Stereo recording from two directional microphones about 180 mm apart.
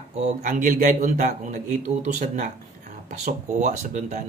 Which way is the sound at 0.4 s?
45° right (ahead or behind).